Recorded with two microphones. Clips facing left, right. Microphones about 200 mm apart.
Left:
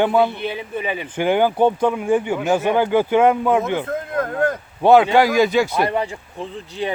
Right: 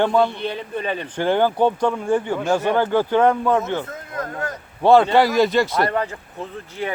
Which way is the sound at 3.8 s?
55° left (ahead or behind).